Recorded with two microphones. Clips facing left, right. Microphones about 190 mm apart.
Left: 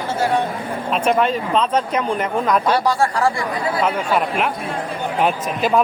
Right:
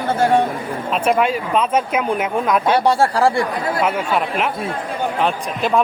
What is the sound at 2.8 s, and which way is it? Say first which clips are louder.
Speech: right 3 dB; 30° right (ahead or behind).